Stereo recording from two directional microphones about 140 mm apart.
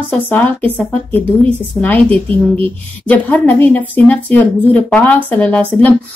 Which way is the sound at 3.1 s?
10° left (ahead or behind).